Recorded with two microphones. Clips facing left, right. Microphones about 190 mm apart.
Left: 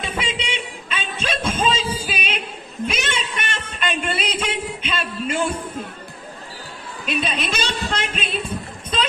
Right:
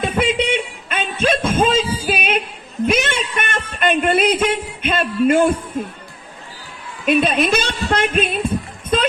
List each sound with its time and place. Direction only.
0.0 s music: 55° right (ahead or behind)
2.8 s a man's voice: 50° right (ahead or behind)
7.0 s a woman's voice: 55° right (ahead or behind)
8.9 s a sound: 55° right (ahead or behind)